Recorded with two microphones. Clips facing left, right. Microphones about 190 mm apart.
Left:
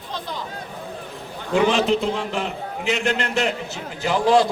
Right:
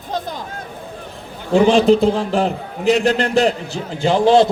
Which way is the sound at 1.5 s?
35° right (ahead or behind).